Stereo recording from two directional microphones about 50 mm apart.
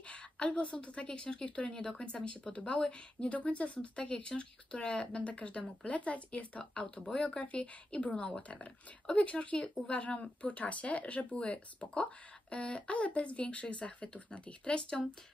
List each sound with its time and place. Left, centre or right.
0.1 s speech: left